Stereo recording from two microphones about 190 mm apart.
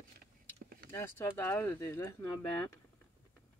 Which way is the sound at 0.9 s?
15° left (ahead or behind).